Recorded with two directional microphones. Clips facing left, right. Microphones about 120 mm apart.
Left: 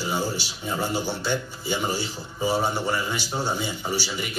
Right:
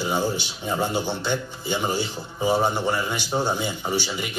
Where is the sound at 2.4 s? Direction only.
15° right (ahead or behind).